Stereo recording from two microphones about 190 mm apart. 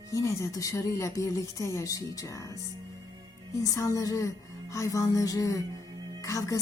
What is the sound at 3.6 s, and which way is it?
A woman's voice, 15° left (ahead or behind).